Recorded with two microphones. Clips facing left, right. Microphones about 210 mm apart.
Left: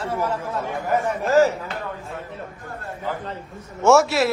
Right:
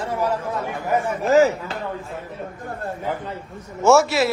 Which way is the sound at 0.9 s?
15° right (ahead or behind).